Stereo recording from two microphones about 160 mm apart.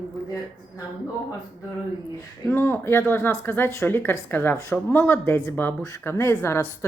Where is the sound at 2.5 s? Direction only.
15° left (ahead or behind).